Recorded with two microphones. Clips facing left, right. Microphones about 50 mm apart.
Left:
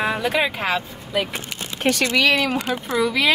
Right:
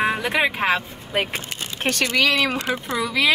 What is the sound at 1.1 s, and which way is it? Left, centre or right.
Speech, right.